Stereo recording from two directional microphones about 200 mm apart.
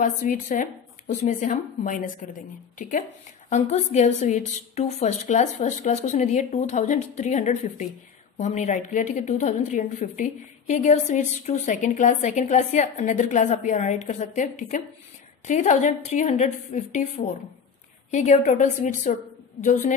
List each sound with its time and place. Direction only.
0.0 s a woman's voice: 40° left (ahead or behind)
3.4 s a woman's voice: 35° left (ahead or behind)